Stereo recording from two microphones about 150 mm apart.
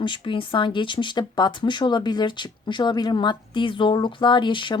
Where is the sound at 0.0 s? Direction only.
35° left (ahead or behind).